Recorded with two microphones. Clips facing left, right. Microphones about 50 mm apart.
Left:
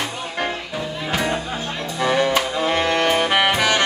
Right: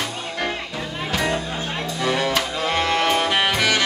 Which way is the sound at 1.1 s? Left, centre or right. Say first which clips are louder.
Even; centre.